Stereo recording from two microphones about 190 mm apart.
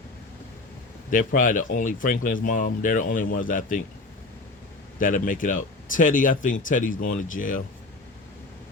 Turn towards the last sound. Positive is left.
turn(degrees=45)  # may be behind; listen again after turning